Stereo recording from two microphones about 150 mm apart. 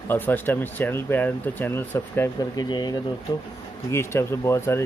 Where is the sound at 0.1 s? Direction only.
15° left (ahead or behind).